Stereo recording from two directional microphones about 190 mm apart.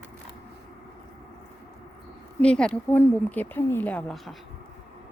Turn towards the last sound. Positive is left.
turn(degrees=0)  # may be behind; listen again after turning